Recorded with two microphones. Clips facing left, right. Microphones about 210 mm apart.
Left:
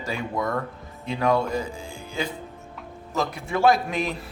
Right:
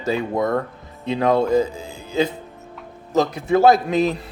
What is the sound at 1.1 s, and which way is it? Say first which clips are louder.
Speech: right 6 dB; 20° right (ahead or behind).